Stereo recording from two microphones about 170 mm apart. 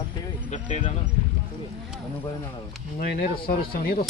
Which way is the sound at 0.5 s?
40° left (ahead or behind).